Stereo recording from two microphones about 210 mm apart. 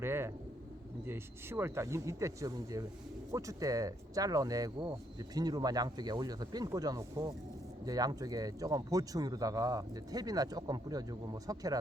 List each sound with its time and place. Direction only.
0.0 s speech: 10° right (ahead or behind)